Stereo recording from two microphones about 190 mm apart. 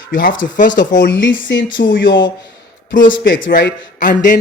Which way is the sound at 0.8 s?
60° left (ahead or behind).